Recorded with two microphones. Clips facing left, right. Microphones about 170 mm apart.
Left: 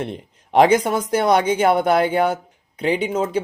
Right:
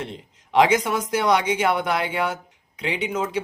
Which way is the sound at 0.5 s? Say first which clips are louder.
Left 4 dB; 50° left (ahead or behind).